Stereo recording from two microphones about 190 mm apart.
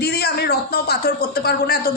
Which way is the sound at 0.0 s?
55° left (ahead or behind).